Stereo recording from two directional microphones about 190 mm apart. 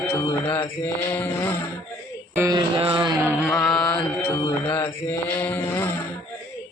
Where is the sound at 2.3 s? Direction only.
15° right (ahead or behind).